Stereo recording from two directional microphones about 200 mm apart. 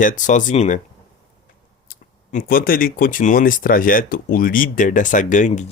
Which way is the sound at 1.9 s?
45° left (ahead or behind).